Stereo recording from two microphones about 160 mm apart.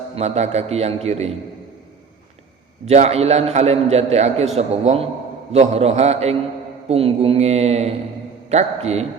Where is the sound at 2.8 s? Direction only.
45° right (ahead or behind).